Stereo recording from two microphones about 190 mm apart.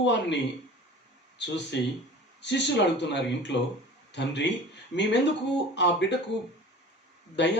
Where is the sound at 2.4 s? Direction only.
65° left (ahead or behind).